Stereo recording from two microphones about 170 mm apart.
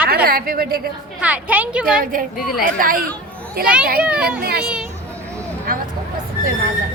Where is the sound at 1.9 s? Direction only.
55° right (ahead or behind).